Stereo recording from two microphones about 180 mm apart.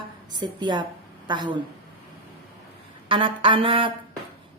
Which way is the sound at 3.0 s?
30° right (ahead or behind).